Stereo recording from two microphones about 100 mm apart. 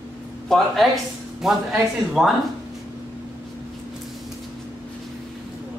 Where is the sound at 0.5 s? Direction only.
Centre (ahead or behind).